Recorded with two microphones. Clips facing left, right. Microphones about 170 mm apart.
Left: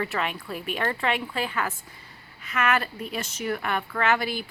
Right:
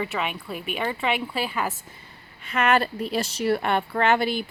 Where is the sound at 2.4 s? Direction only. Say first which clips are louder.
Right 4 dB; 30° right (ahead or behind).